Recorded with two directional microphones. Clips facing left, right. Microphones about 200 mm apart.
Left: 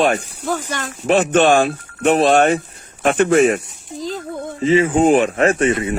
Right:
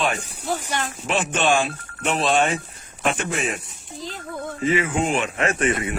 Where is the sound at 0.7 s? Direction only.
45° left (ahead or behind).